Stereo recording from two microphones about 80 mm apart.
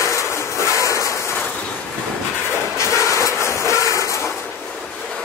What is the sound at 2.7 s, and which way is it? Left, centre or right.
Vehicle, left.